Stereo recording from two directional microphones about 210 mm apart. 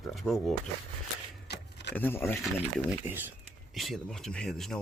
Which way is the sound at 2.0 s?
10° left (ahead or behind).